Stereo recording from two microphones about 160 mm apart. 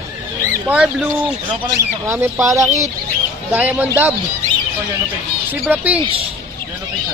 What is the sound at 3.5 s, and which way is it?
Bird, 10° right (ahead or behind).